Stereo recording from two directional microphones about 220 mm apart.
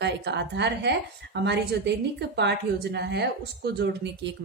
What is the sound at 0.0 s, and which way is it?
A woman's voice, 50° right (ahead or behind).